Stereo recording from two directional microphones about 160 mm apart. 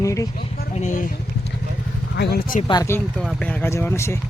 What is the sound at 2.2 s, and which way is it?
Speech, 75° left (ahead or behind).